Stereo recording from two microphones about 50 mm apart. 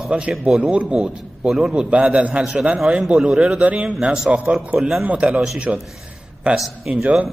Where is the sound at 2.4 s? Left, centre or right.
Centre.